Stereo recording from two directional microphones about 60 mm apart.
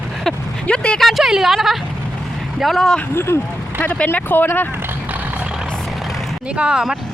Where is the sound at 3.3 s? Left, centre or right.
Left.